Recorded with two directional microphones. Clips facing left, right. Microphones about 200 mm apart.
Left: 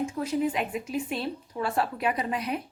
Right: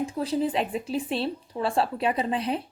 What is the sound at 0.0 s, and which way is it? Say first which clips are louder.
A woman's voice: right 1 dB; 35° right (ahead or behind).